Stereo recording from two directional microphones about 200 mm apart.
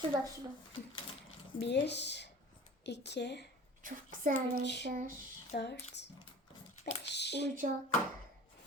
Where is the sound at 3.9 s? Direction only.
45° right (ahead or behind).